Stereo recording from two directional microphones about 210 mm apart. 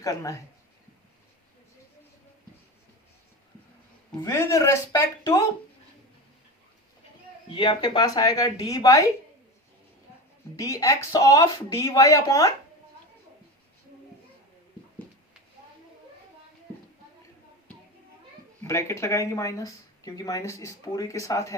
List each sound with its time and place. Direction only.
0.0 s speech: 15° left (ahead or behind)
4.2 s speech: 15° left (ahead or behind)
7.5 s speech: 20° left (ahead or behind)
10.6 s speech: 15° left (ahead or behind)
18.6 s speech: 10° left (ahead or behind)